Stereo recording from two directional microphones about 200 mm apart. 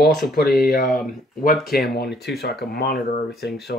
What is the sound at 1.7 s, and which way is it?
Speech, 55° left (ahead or behind).